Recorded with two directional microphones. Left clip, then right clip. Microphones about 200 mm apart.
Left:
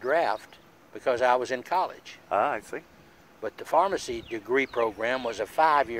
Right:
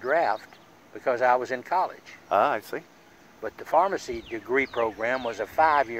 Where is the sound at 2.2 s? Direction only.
35° right (ahead or behind).